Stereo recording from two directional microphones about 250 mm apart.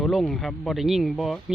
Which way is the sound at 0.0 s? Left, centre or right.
Centre.